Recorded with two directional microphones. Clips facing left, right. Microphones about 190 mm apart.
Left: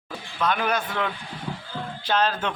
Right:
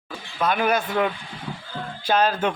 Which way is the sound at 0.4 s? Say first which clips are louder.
Right 3 dB; 10° right (ahead or behind).